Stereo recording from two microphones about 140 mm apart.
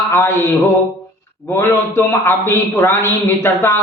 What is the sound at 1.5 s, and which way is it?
A man's voice, 15° left (ahead or behind).